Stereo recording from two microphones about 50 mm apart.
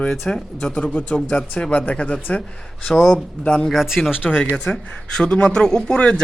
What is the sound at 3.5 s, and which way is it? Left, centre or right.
Speech, centre.